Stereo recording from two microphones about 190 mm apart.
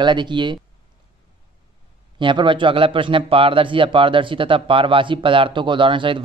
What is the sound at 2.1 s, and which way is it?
A man's voice, 25° right (ahead or behind).